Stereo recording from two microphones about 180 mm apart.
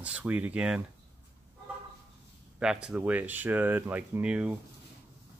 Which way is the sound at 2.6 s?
5° right (ahead or behind).